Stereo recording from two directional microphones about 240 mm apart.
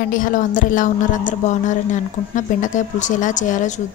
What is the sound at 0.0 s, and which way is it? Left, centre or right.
A woman's voice, left.